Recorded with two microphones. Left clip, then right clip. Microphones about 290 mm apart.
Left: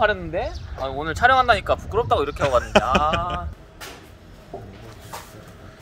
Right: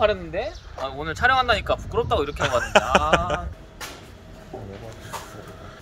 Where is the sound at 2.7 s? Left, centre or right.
Centre.